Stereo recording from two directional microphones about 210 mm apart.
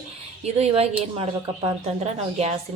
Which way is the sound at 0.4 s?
30° right (ahead or behind).